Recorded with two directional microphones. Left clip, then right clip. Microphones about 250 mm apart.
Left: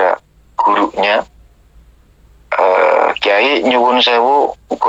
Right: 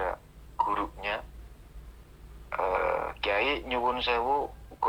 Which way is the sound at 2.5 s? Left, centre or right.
Left.